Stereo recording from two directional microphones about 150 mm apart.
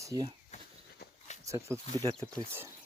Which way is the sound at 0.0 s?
20° right (ahead or behind).